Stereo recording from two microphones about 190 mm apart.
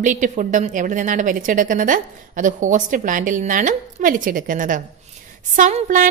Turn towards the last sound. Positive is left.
turn(degrees=-45)  # may be behind; listen again after turning